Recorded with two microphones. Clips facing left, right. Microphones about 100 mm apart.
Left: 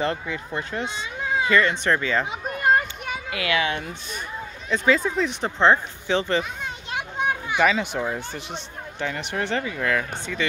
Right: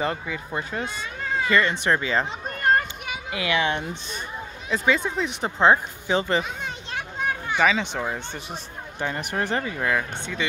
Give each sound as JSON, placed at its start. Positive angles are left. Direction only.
{"t": 0.0, "sound": "speech", "side_deg": -10}
{"t": 1.2, "sound": "cat", "side_deg": 0}
{"t": 1.9, "sound": "speech", "side_deg": -15}
{"t": 2.4, "sound": "a sound", "side_deg": 5}
{"t": 3.3, "sound": "speech", "side_deg": -25}
{"t": 4.6, "sound": "speech", "side_deg": -5}
{"t": 6.9, "sound": "children playing", "side_deg": 10}
{"t": 8.0, "sound": "speech", "side_deg": -5}
{"t": 9.2, "sound": "speech", "side_deg": -40}
{"t": 9.6, "sound": "speech", "side_deg": -20}